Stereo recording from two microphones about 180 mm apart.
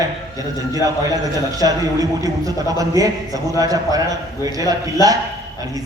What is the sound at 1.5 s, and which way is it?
A man's voice, 20° right (ahead or behind).